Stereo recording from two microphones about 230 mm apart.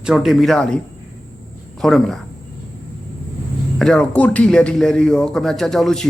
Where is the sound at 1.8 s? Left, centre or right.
Centre.